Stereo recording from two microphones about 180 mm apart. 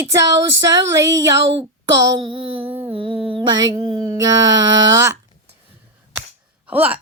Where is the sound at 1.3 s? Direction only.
85° right.